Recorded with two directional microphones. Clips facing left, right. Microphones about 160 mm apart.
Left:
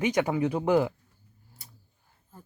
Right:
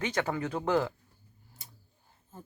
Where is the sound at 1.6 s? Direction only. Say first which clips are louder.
Left 1 dB; 20° right (ahead or behind).